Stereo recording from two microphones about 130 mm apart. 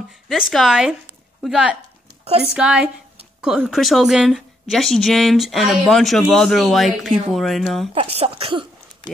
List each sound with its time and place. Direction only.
0.3 s a woman's voice: centre (ahead or behind)
7.9 s speech: 50° right (ahead or behind)
9.0 s speech: 35° left (ahead or behind)